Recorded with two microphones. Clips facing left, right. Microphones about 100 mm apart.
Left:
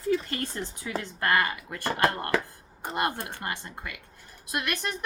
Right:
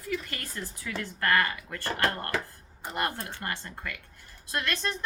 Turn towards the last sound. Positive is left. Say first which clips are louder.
# even
turn(degrees=15)  # may be behind; listen again after turning